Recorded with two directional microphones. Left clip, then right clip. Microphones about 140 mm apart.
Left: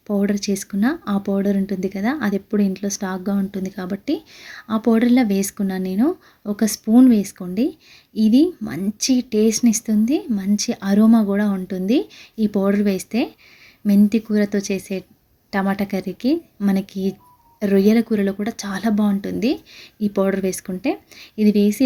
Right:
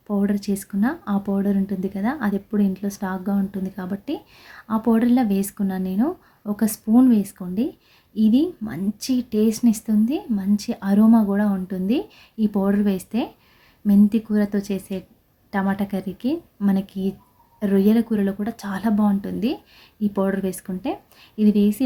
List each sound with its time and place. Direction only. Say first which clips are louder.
0.1 s speech: left 3 dB; 20° left (ahead or behind)